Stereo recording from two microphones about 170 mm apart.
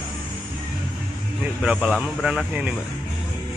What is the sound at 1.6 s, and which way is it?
A man's voice, 5° right (ahead or behind).